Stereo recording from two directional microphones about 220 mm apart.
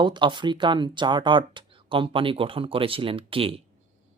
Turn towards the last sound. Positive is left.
turn(degrees=-25)  # may be behind; listen again after turning